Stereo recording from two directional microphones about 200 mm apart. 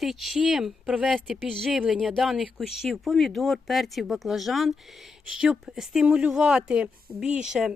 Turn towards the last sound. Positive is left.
turn(degrees=-5)  # may be behind; listen again after turning